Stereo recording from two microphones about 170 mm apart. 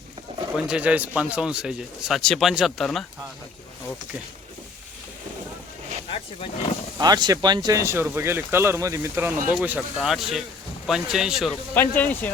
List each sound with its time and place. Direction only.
0.5 s a man's voice: 5° right (ahead or behind)
6.1 s speech: 35° left (ahead or behind)
7.0 s a man's voice: 25° right (ahead or behind); by 11.5 s centre (ahead or behind)
11.7 s speech: 10° left (ahead or behind)